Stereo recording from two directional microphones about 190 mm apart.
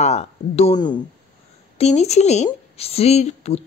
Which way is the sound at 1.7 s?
35° left (ahead or behind).